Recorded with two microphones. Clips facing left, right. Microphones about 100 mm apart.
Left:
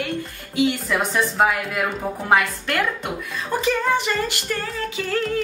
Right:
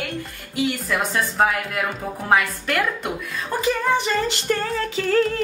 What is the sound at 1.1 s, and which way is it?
A woman's voice, 5° left (ahead or behind).